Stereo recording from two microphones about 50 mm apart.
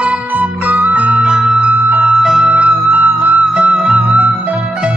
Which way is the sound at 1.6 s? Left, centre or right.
Right.